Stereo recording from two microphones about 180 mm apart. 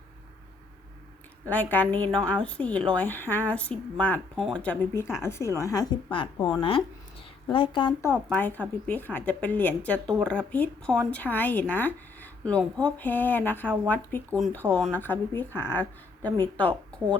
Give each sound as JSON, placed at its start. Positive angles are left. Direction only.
{"t": 1.5, "sound": "a woman's voice", "side_deg": 10}
{"t": 8.3, "sound": "a woman's voice", "side_deg": 10}